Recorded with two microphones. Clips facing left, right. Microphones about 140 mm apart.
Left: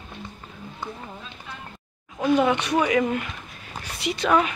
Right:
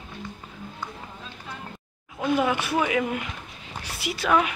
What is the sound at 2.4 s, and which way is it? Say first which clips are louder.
Speech: left 3 dB; 5° right (ahead or behind).